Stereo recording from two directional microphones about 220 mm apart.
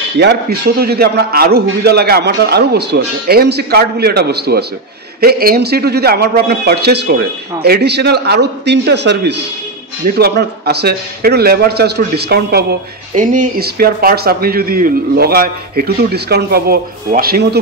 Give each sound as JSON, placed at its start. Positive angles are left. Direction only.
{"t": 0.2, "sound": "speech", "side_deg": -45}
{"t": 13.1, "sound": "speech", "side_deg": -35}